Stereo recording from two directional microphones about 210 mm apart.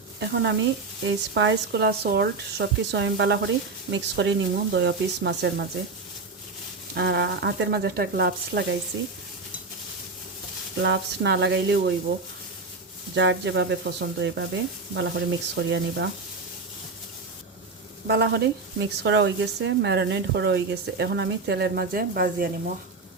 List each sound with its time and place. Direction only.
0.2 s speech: 55° right (ahead or behind)
6.9 s speech: 55° right (ahead or behind)
10.8 s speech: 55° right (ahead or behind)
13.1 s speech: 55° right (ahead or behind)
18.1 s speech: 55° right (ahead or behind)